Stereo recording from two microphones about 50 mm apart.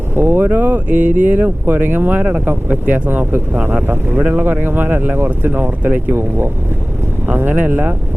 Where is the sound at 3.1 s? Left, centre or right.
Right.